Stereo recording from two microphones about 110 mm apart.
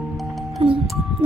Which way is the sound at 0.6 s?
55° right (ahead or behind).